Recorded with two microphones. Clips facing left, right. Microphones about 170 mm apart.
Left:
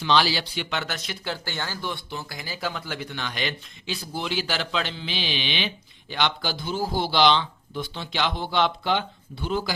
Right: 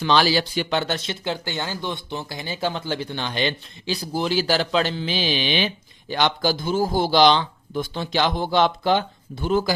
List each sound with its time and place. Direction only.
0.0 s speech: 45° right (ahead or behind)